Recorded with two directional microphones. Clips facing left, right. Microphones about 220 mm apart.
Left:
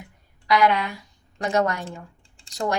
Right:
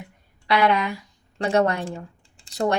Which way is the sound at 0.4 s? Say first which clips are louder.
Even; 30° right (ahead or behind).